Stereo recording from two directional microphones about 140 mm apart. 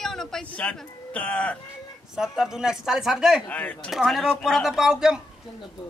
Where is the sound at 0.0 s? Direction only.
5° left (ahead or behind).